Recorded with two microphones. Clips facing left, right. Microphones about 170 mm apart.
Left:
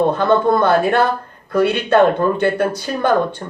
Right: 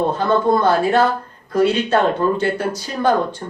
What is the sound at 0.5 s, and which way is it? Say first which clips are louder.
Speech: left 1 dB; 60° left (ahead or behind).